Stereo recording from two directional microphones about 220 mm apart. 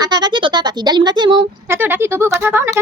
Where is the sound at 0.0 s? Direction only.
20° right (ahead or behind).